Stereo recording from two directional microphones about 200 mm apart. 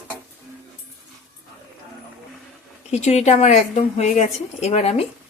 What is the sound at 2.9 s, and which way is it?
A woman's voice, 35° left (ahead or behind).